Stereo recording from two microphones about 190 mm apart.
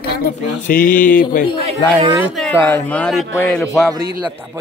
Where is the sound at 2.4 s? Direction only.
10° left (ahead or behind).